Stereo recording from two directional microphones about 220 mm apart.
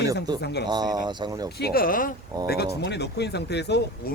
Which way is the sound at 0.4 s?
50° left (ahead or behind).